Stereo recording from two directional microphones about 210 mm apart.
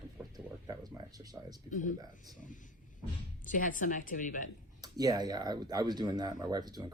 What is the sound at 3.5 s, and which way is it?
Speech, 40° left (ahead or behind).